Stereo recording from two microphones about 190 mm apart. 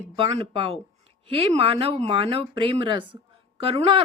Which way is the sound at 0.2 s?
25° right (ahead or behind).